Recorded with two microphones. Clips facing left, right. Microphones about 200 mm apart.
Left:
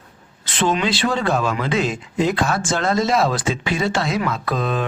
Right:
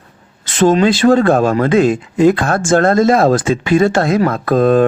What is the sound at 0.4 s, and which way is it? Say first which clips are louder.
Speech: right 9 dB; 45° right (ahead or behind).